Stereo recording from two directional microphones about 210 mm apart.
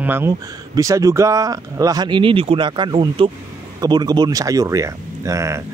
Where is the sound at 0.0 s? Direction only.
10° right (ahead or behind).